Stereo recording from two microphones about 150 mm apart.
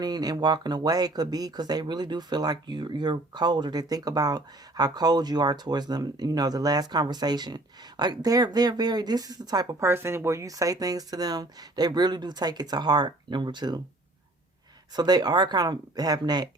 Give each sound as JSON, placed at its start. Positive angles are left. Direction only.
{"t": 0.0, "sound": "speech", "side_deg": -25}
{"t": 14.9, "sound": "speech", "side_deg": -25}